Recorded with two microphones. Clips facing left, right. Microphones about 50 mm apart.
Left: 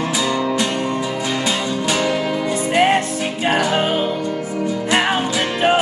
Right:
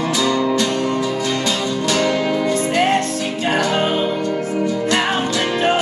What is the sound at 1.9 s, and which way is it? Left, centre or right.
Music, centre.